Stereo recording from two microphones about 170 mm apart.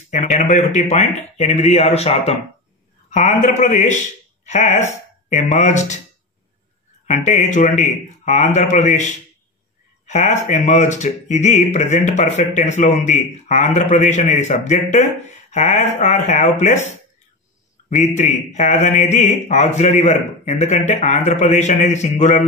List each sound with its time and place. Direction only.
0.1 s speech: 45° left (ahead or behind)
7.1 s speech: 45° left (ahead or behind)
10.0 s speech: 45° left (ahead or behind)